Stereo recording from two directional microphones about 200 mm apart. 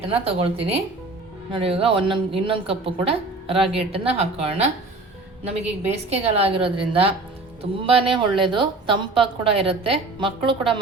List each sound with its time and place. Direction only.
0.1 s a woman's voice: 30° right (ahead or behind)